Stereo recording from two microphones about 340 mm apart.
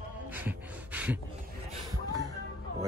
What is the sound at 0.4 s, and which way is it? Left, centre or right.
Gasp, centre.